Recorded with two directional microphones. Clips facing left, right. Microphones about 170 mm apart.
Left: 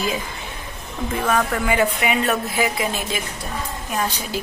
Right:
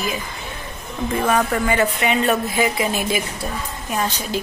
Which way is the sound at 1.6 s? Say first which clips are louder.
Right 1 dB; 10° left (ahead or behind).